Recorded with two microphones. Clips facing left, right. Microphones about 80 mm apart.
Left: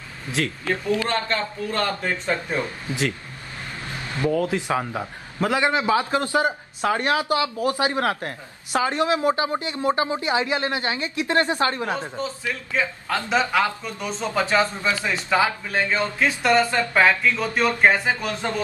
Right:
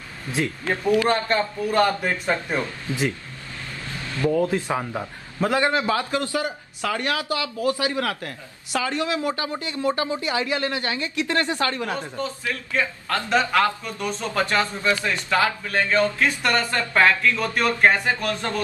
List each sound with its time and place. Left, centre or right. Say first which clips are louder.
0.4 s speech: even; right
2.9 s a man's voice: right 2 dB; left
4.5 s a man's voice: left 1 dB; centre